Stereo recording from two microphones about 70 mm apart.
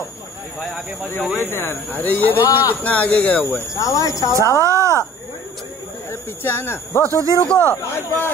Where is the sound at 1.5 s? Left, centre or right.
Left.